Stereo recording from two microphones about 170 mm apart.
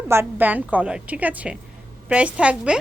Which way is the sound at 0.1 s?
10° right (ahead or behind).